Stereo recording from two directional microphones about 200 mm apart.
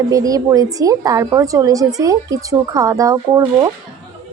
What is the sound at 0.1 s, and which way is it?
Speech, 15° right (ahead or behind).